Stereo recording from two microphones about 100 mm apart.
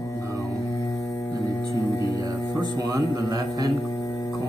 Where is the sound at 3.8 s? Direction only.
35° left (ahead or behind).